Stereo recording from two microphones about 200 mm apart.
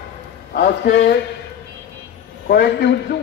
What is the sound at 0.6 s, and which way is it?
Speech, 55° left (ahead or behind).